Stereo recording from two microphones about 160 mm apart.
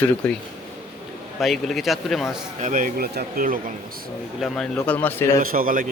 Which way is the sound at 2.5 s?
55° right (ahead or behind).